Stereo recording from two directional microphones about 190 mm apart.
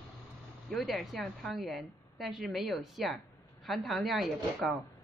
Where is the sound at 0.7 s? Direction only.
Centre (ahead or behind).